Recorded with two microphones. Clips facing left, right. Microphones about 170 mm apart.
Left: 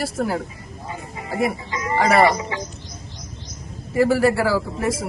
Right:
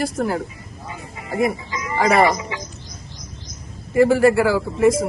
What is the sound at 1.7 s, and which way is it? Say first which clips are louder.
Music: left 3 dB; 35° left (ahead or behind).